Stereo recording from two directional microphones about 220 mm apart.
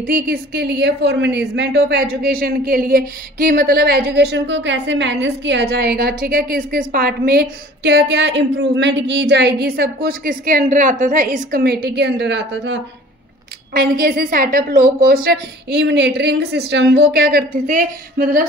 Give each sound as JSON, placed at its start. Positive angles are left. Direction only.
{"t": 0.0, "sound": "a woman's voice", "side_deg": -45}
{"t": 13.7, "sound": "a woman's voice", "side_deg": -40}